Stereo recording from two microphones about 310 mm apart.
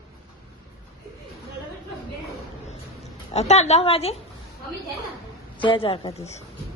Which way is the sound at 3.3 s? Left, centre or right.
Left.